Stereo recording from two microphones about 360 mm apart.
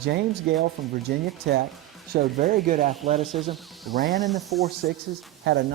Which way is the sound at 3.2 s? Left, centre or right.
Centre.